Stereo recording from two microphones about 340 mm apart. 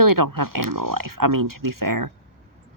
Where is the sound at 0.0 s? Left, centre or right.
Right.